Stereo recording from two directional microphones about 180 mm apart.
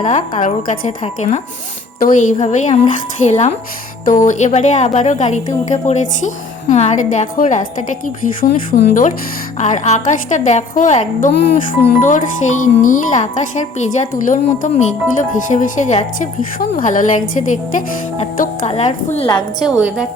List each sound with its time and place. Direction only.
0.0 s a woman's voice: 40° left (ahead or behind)